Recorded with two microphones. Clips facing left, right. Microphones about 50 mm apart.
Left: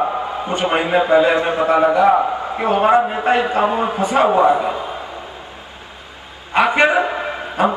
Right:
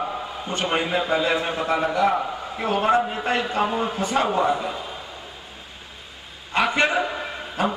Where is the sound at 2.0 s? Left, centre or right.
Left.